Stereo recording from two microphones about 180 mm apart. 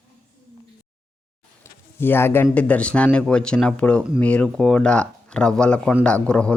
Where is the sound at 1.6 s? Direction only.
15° left (ahead or behind).